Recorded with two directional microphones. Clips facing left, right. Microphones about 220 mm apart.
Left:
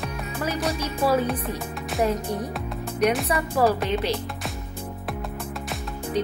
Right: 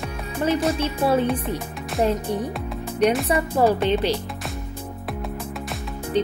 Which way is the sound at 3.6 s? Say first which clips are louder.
Right 2 dB; 25° right (ahead or behind).